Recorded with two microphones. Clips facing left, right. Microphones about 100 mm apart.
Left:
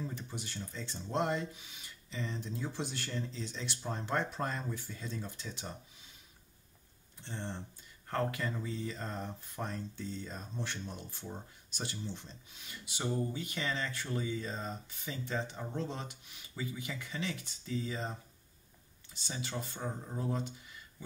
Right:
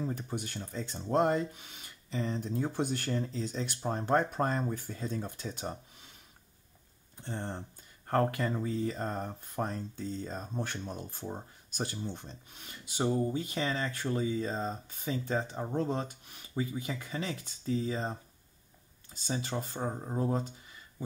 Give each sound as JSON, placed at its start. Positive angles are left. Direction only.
{"t": 0.1, "sound": "speech", "side_deg": -50}
{"t": 7.2, "sound": "speech", "side_deg": -45}
{"t": 13.0, "sound": "speech", "side_deg": -35}
{"t": 19.3, "sound": "speech", "side_deg": -35}